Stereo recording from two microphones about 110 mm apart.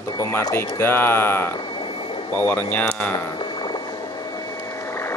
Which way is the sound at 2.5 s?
15° left (ahead or behind).